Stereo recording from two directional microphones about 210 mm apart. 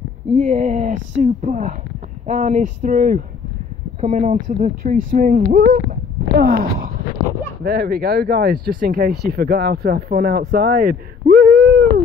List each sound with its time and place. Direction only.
0.3 s speech: 35° right (ahead or behind)
5.5 s a sound: 45° right (ahead or behind)
7.6 s speech: 45° right (ahead or behind)